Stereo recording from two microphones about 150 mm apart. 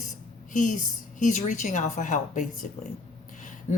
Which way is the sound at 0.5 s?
55° left (ahead or behind).